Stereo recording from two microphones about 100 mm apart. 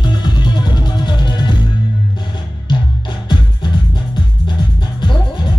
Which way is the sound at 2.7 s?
50° left (ahead or behind).